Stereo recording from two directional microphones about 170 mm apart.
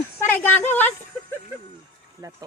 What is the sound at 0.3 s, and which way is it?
Speech, 10° left (ahead or behind).